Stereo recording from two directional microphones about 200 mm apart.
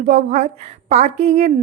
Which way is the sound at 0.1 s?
35° right (ahead or behind).